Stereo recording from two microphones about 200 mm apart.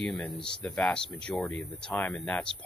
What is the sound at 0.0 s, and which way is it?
Speech, 5° left (ahead or behind).